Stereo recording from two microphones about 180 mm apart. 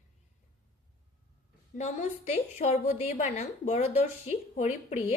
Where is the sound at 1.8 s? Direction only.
40° left (ahead or behind).